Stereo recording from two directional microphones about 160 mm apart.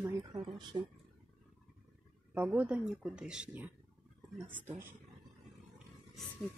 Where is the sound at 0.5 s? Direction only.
25° right (ahead or behind).